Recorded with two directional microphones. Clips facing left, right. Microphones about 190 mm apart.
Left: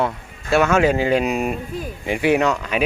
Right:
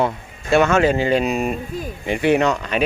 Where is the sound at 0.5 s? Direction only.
5° left (ahead or behind).